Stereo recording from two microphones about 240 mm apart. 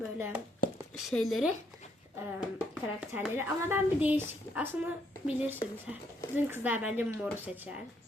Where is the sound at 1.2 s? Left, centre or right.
Centre.